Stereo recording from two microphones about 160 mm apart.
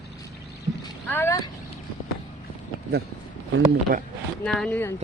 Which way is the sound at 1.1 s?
15° left (ahead or behind).